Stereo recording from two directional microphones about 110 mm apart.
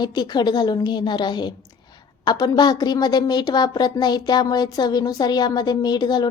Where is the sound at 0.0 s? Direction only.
40° left (ahead or behind).